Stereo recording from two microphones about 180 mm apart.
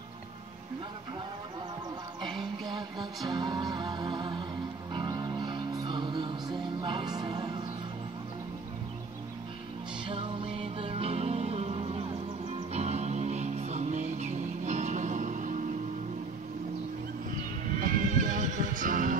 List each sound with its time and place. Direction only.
3.3 s music: 25° right (ahead or behind)
10.0 s music: 30° right (ahead or behind)
17.7 s neigh: 50° right (ahead or behind)
18.8 s music: 50° right (ahead or behind)